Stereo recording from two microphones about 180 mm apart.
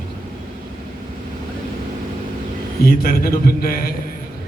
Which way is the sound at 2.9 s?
55° left (ahead or behind).